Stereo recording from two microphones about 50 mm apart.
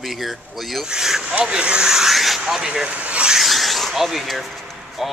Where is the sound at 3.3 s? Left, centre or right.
Centre.